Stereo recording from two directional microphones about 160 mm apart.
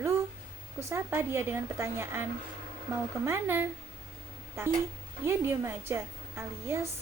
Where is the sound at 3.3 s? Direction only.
15° right (ahead or behind).